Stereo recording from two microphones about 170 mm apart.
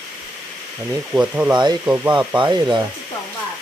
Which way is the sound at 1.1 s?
10° right (ahead or behind).